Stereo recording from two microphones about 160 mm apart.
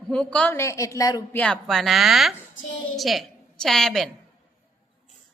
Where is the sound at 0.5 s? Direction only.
20° left (ahead or behind).